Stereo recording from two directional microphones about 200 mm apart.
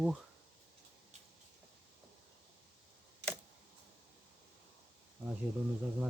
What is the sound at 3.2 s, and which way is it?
Camera, 60° right (ahead or behind).